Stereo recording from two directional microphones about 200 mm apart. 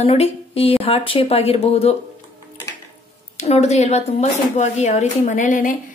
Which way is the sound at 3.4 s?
35° left (ahead or behind).